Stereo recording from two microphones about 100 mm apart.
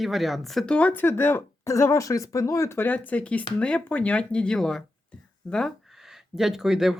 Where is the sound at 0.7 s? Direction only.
15° left (ahead or behind).